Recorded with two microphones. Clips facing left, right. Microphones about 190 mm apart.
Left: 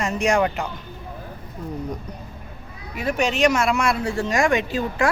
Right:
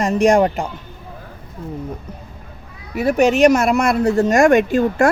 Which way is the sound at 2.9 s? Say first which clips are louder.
Right 8 dB; 40° right (ahead or behind).